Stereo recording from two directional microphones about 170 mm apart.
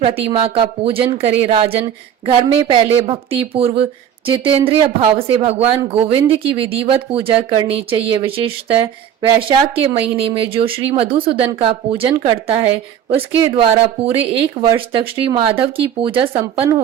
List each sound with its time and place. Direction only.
0.0 s a woman's voice: 35° right (ahead or behind)